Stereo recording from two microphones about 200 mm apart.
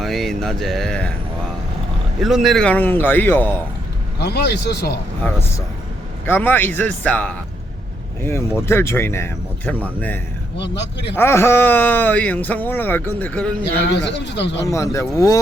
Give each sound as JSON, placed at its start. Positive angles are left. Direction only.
{"t": 0.0, "sound": "speech", "side_deg": 0}
{"t": 2.2, "sound": "a man's voice", "side_deg": 0}
{"t": 4.2, "sound": "speech", "side_deg": 55}
{"t": 5.2, "sound": "a man's voice", "side_deg": 10}
{"t": 10.6, "sound": "speech", "side_deg": 60}
{"t": 11.2, "sound": "a man's voice", "side_deg": 10}
{"t": 13.8, "sound": "speech", "side_deg": 60}
{"t": 14.7, "sound": "a man's voice", "side_deg": 15}